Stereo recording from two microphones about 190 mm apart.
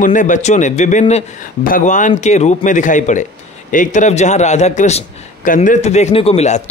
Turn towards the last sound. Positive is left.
turn(degrees=35)  # may be behind; listen again after turning